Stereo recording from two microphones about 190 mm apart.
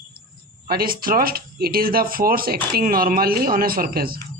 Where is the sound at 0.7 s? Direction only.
50° right (ahead or behind).